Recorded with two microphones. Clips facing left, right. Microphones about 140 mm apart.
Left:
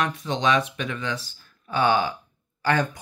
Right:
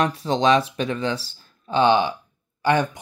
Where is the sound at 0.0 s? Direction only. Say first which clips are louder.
Right 4 dB; 35° right (ahead or behind).